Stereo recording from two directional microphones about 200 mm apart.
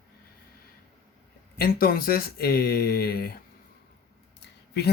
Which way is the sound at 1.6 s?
45° left (ahead or behind).